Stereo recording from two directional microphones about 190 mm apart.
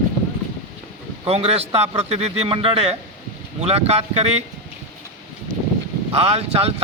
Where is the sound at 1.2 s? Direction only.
30° right (ahead or behind).